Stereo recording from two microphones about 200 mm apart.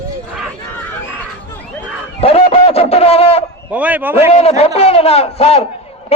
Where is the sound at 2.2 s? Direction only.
30° left (ahead or behind).